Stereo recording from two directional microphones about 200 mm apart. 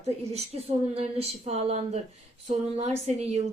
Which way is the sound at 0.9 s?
30° right (ahead or behind).